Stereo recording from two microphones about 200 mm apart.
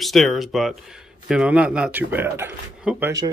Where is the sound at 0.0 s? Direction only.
Centre (ahead or behind).